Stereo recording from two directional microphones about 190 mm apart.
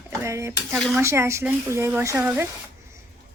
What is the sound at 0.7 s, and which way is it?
Speech, centre (ahead or behind).